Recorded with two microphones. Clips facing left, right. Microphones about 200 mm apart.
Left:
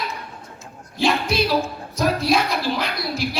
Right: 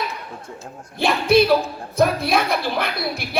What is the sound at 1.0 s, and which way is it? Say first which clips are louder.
A woman's voice: right 4 dB; 55° right (ahead or behind).